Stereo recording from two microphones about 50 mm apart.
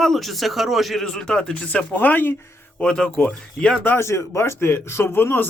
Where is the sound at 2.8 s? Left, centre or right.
Centre.